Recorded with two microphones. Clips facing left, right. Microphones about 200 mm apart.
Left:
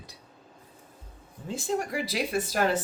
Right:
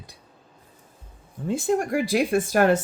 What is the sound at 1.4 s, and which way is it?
Speech, 55° right (ahead or behind).